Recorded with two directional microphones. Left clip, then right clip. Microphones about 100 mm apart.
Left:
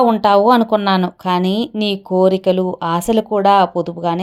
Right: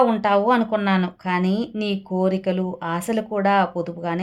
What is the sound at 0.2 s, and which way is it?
A woman's voice, 55° left (ahead or behind).